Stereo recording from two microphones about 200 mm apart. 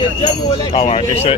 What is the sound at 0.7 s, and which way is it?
Speech, 30° left (ahead or behind).